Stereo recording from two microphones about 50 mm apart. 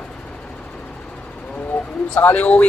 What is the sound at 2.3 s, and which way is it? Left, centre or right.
Speech, left.